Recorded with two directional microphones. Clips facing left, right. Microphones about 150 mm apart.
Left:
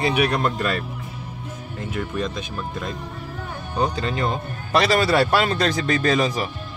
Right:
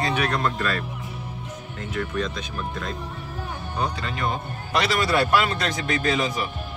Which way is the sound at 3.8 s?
30° left (ahead or behind).